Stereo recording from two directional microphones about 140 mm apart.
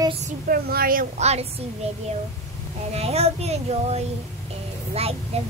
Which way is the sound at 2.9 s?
50° right (ahead or behind).